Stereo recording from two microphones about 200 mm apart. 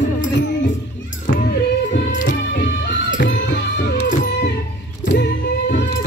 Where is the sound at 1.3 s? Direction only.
45° left (ahead or behind).